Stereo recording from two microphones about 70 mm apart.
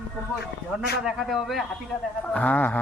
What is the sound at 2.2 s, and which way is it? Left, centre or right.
Speech, left.